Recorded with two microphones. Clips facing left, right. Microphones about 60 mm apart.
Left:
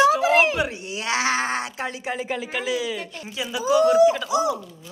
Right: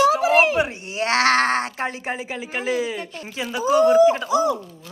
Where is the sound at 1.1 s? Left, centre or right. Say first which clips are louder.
Right 5 dB; right.